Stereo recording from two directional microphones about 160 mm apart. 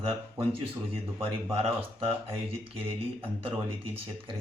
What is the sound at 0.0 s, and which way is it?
Speech, 35° right (ahead or behind).